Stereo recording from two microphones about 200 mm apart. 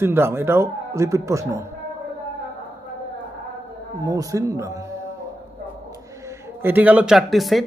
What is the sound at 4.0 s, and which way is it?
Speech, 15° right (ahead or behind).